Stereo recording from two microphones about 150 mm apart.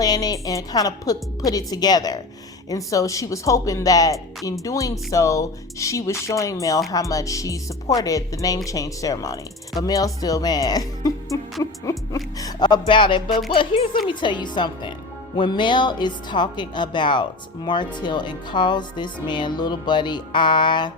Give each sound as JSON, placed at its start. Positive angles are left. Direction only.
{"t": 0.0, "sound": "speech", "side_deg": 25}